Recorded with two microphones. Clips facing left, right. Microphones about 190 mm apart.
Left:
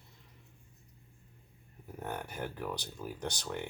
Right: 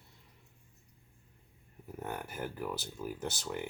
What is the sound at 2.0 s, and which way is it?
Speech, 5° right (ahead or behind).